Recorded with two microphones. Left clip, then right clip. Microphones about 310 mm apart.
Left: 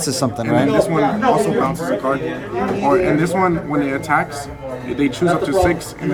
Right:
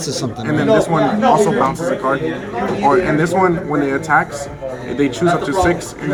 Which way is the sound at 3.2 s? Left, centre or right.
Centre.